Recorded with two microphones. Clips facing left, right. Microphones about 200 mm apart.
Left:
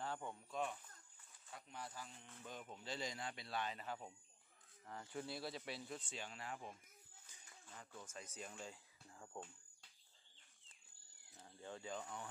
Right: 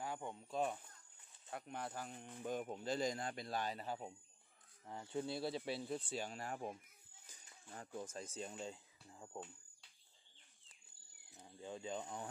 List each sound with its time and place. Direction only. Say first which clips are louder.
0.0 s a sound: right 2 dB; 15° right (ahead or behind)
0.5 s speech: right 5 dB; 35° right (ahead or behind)
1.5 s speech: right 7 dB; 55° right (ahead or behind); by 4.0 s 35° right (ahead or behind)
4.8 s speech: right 5 dB; 25° right (ahead or behind); by 6.8 s 45° right (ahead or behind)
7.9 s speech: right 9 dB; 35° right (ahead or behind); by 9.4 s 15° right (ahead or behind)
11.3 s speech: right 3 dB; 15° right (ahead or behind)